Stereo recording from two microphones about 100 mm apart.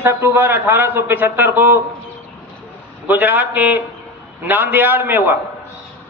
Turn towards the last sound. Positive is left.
turn(degrees=-20)  # may be behind; listen again after turning